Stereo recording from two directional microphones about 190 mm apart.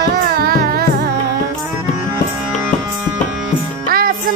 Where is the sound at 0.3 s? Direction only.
50° right (ahead or behind).